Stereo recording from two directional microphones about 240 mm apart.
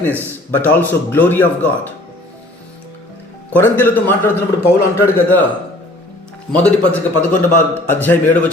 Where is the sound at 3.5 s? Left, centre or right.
Centre.